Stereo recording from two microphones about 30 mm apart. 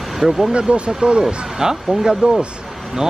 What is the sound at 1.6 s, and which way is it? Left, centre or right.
Speech, centre.